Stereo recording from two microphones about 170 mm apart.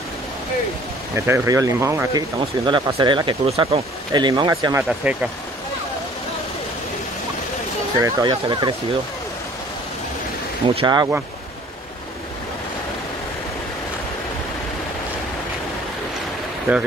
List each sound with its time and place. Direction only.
1.1 s speech: 15° right (ahead or behind)
2.6 s speech: 25° right (ahead or behind)
4.8 s speech: 10° right (ahead or behind)
8.0 s speech: 25° right (ahead or behind)
10.7 s speech: 30° right (ahead or behind)
16.7 s speech: 15° right (ahead or behind)